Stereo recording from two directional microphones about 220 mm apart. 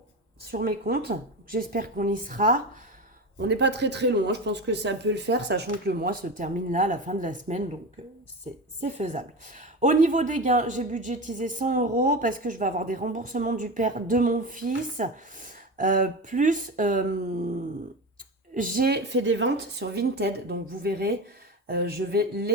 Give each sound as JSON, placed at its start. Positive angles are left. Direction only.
{"t": 0.5, "sound": "speech", "side_deg": -45}
{"t": 3.3, "sound": "speech", "side_deg": -50}
{"t": 8.8, "sound": "speech", "side_deg": -35}
{"t": 18.5, "sound": "speech", "side_deg": -40}